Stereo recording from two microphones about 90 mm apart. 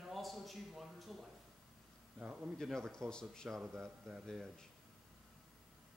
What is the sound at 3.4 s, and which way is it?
Speech, 15° right (ahead or behind).